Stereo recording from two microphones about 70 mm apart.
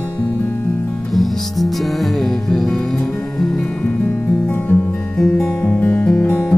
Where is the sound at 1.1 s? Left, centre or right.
Centre; by 4.8 s left.